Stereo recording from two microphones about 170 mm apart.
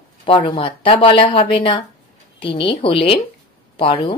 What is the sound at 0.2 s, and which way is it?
A woman's voice, 30° left (ahead or behind).